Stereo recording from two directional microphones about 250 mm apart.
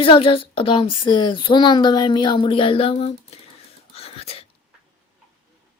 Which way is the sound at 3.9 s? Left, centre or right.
Left.